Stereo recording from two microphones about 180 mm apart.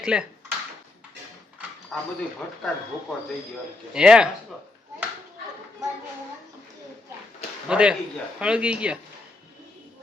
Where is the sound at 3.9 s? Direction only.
5° right (ahead or behind).